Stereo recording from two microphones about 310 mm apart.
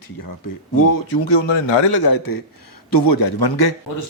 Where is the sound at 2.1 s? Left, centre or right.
Left.